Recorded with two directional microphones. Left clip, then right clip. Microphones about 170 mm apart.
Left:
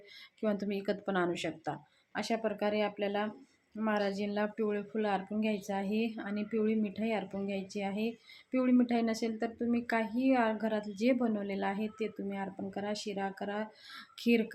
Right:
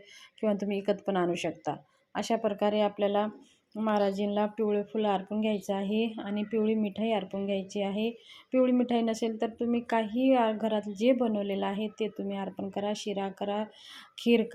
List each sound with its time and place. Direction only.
0.4 s a woman's voice: 15° right (ahead or behind)